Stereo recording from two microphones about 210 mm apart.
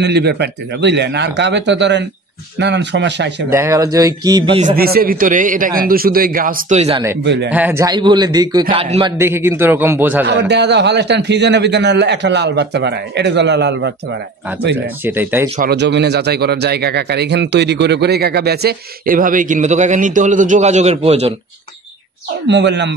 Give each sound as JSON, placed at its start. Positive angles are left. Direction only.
{"t": 0.0, "sound": "a man's voice", "side_deg": -55}
{"t": 3.5, "sound": "speech", "side_deg": -15}
{"t": 4.6, "sound": "a man's voice", "side_deg": -40}
{"t": 7.2, "sound": "a man's voice", "side_deg": -55}
{"t": 7.5, "sound": "a man's voice", "side_deg": -10}
{"t": 9.2, "sound": "speech", "side_deg": -10}
{"t": 10.2, "sound": "a man's voice", "side_deg": -55}
{"t": 15.0, "sound": "speech", "side_deg": -10}
{"t": 15.7, "sound": "speech", "side_deg": -55}
{"t": 22.5, "sound": "a man's voice", "side_deg": -55}